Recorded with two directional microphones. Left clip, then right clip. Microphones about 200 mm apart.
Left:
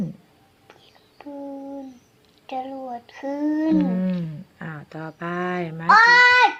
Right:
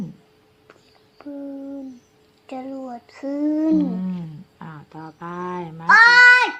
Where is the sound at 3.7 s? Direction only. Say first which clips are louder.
Even; 10° left (ahead or behind).